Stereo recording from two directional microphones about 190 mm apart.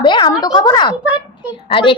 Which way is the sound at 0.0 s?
20° left (ahead or behind).